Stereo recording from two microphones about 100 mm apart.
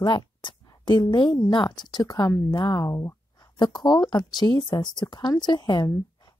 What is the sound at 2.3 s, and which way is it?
Speech, 25° left (ahead or behind).